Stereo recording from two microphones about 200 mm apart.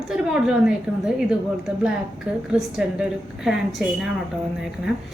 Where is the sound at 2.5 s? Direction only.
5° right (ahead or behind).